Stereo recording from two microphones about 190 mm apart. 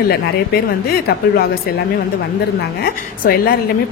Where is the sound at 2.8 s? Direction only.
50° left (ahead or behind).